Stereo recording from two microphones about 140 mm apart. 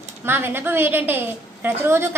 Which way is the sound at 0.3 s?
15° right (ahead or behind).